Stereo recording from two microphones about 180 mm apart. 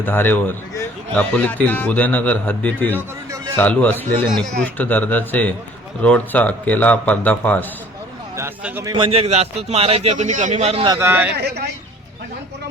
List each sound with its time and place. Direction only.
0.0 s a man's voice: 10° left (ahead or behind)
8.4 s a man's voice: 10° right (ahead or behind)
8.9 s a man's voice: 30° right (ahead or behind)
10.9 s a man's voice: 15° right (ahead or behind)
11.3 s speech: 65° right (ahead or behind)